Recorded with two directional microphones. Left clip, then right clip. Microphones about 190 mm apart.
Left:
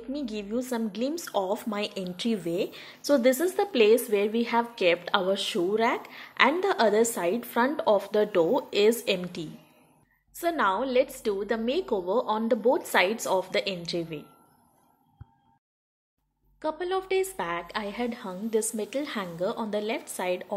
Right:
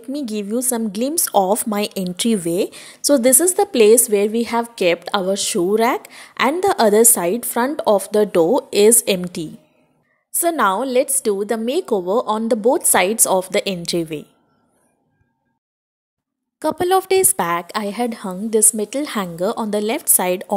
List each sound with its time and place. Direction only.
0.1 s a woman's voice: 55° right (ahead or behind)
16.5 s a woman's voice: 55° right (ahead or behind)